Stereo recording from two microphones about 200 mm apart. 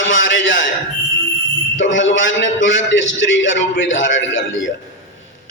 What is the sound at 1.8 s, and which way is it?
A man's voice, 70° left (ahead or behind).